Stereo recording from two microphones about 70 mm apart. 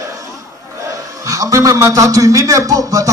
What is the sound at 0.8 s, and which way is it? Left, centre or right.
A man's voice, right.